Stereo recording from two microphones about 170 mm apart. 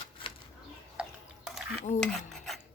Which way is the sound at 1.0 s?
Centre (ahead or behind).